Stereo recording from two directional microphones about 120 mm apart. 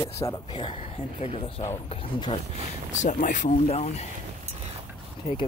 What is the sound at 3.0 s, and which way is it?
Speech, 90° left.